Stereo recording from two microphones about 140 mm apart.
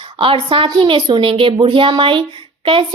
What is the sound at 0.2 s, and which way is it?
A woman's voice, 35° right (ahead or behind).